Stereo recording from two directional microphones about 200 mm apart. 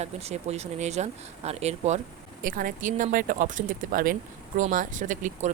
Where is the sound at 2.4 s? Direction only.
45° right (ahead or behind).